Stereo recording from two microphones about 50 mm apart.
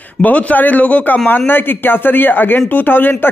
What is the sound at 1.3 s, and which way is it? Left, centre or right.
Speech, left.